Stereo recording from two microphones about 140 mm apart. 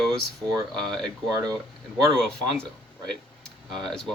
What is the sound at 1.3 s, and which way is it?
Speech, 25° right (ahead or behind).